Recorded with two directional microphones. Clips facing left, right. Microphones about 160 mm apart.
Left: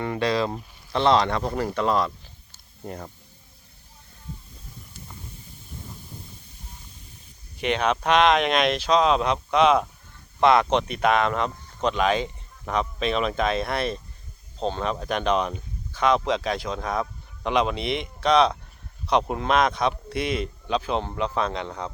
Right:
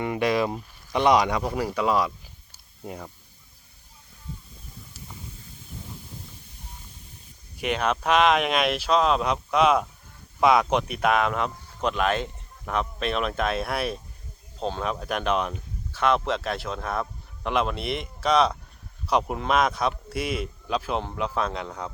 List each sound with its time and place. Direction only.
0.0 s speech: 15° right (ahead or behind)
4.9 s hiss: centre (ahead or behind)
7.6 s speech: 5° right (ahead or behind)